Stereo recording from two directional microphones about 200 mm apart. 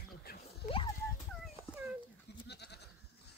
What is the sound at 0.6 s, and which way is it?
Speech, 25° left (ahead or behind).